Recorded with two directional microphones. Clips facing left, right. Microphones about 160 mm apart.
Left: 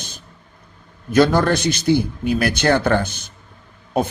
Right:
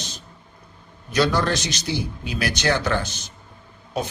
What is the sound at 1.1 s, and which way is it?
Speech, 50° left (ahead or behind).